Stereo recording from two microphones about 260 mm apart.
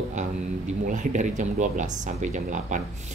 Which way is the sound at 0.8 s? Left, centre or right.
Right.